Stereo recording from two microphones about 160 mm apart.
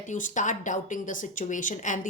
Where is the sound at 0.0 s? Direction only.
50° left (ahead or behind).